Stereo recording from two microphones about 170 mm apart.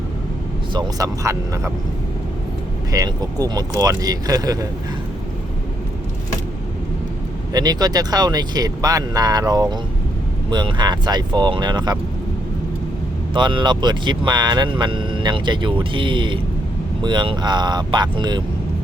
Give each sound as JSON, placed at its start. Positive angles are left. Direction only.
{"t": 0.7, "sound": "speech", "side_deg": -25}
{"t": 2.9, "sound": "speech", "side_deg": -20}
{"t": 7.5, "sound": "speech", "side_deg": -25}
{"t": 13.3, "sound": "speech", "side_deg": -30}